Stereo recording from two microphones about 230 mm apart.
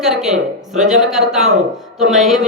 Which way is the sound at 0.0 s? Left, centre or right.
Centre.